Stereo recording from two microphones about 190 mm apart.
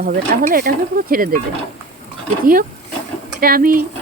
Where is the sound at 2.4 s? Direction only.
50° right (ahead or behind).